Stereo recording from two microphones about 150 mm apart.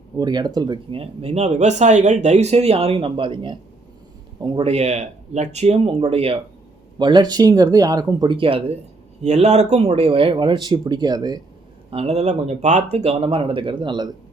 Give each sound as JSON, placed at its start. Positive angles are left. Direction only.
{"t": 0.2, "sound": "speech", "side_deg": -30}
{"t": 7.0, "sound": "speech", "side_deg": -30}
{"t": 11.9, "sound": "speech", "side_deg": -40}